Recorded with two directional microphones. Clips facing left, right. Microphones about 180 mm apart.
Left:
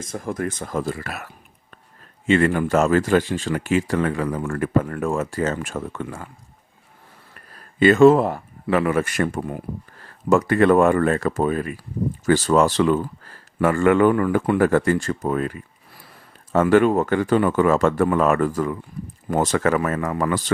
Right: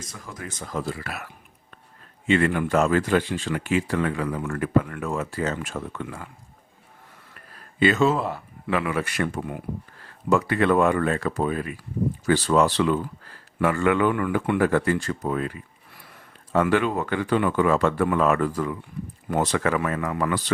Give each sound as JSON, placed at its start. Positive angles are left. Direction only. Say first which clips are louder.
{"t": 0.0, "sound": "speech", "louder": "left 11 dB", "side_deg": 50}
{"t": 7.8, "sound": "speech", "louder": "left 8 dB", "side_deg": 50}